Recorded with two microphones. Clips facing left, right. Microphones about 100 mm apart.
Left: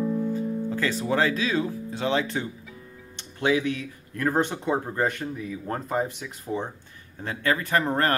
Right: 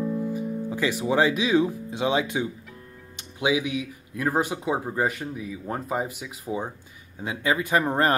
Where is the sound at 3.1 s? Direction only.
10° right (ahead or behind).